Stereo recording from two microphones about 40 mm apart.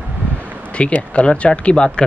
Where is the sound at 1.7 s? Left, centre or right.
Left.